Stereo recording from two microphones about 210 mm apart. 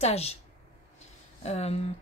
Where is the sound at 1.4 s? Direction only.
30° left (ahead or behind).